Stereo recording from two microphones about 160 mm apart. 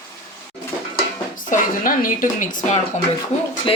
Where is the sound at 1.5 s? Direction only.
60° left (ahead or behind).